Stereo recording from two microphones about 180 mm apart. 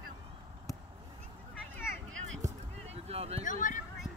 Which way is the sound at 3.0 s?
35° right (ahead or behind).